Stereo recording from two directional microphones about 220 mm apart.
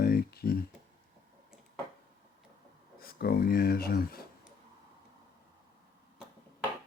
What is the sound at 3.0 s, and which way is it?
Speech, 45° left (ahead or behind).